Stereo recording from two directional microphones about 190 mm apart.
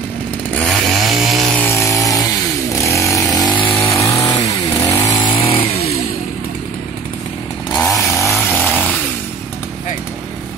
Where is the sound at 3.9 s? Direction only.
15° left (ahead or behind).